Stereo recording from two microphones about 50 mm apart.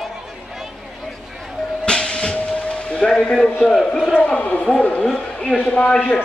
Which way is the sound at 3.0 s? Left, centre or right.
Centre.